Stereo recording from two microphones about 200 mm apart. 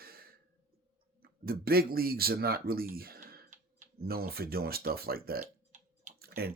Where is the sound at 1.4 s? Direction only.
50° right (ahead or behind).